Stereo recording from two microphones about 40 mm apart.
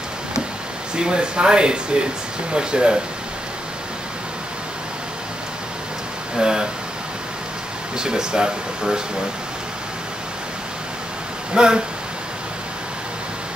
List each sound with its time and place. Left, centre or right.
0.9 s speech: right
6.3 s speech: centre
8.0 s speech: centre
11.5 s speech: right